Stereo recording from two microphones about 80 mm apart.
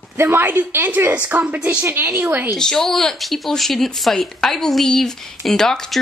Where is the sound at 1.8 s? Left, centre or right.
Right.